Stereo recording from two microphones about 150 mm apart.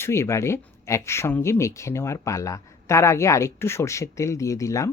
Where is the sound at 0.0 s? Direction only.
20° left (ahead or behind).